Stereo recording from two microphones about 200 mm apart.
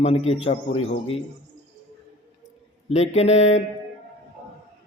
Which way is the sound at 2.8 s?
35° left (ahead or behind).